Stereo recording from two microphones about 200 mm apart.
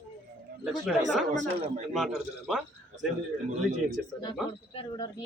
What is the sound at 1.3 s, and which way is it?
Speech, 40° right (ahead or behind).